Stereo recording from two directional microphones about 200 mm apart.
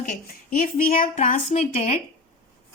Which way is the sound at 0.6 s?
40° left (ahead or behind).